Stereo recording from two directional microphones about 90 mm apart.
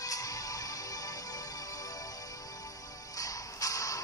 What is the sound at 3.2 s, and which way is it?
Music, 40° left (ahead or behind).